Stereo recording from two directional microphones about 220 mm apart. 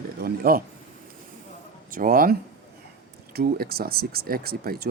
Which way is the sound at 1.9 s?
40° right (ahead or behind).